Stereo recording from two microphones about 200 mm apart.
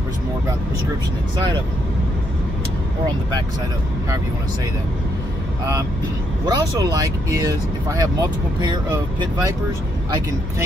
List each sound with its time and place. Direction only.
6.4 s speech: 20° right (ahead or behind)